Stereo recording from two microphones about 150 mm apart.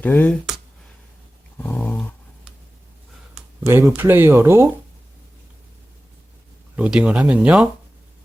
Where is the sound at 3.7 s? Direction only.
15° right (ahead or behind).